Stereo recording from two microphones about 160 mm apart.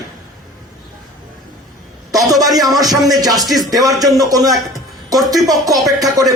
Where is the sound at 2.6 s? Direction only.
25° right (ahead or behind).